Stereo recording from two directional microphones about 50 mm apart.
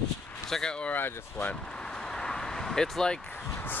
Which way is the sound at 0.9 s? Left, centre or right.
Left.